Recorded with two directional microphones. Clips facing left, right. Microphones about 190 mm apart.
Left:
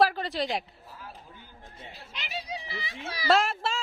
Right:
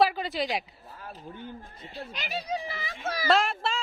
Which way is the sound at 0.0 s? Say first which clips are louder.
Even; centre (ahead or behind).